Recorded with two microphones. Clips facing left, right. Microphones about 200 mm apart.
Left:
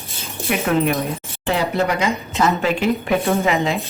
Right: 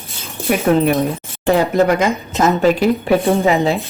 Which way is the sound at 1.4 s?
45° right (ahead or behind).